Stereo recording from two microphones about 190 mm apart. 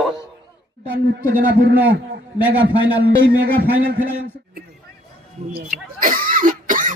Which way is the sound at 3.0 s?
55° right (ahead or behind).